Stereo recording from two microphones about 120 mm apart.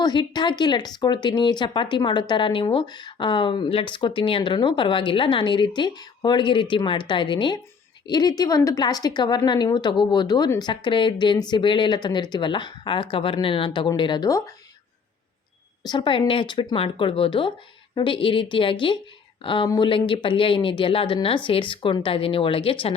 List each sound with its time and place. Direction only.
0.0 s speech: 40° left (ahead or behind)
14.3 s speech: 25° left (ahead or behind)
15.8 s speech: 35° left (ahead or behind)